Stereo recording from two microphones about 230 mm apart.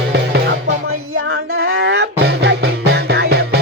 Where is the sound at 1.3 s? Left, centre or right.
Right.